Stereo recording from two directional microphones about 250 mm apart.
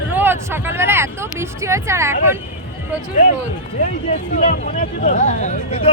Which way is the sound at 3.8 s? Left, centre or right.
Left.